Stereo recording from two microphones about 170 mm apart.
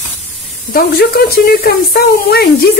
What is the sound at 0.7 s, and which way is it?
A woman's voice, 65° left (ahead or behind).